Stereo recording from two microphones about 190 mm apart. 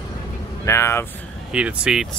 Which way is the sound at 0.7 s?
15° left (ahead or behind).